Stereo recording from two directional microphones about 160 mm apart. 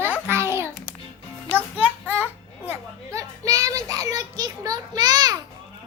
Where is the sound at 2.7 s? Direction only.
20° right (ahead or behind).